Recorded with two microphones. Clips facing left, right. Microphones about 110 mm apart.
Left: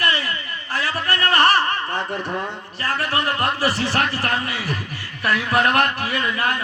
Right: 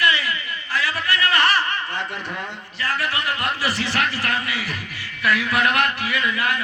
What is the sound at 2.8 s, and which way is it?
A man's voice, 40° left (ahead or behind).